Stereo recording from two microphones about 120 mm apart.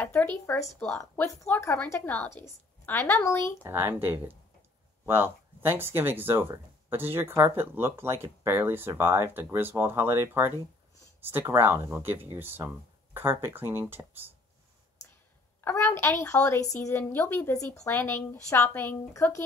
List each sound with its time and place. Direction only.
0.0 s a woman's voice: 15° left (ahead or behind)
3.6 s speech: 20° right (ahead or behind)
15.6 s a woman's voice: 20° left (ahead or behind)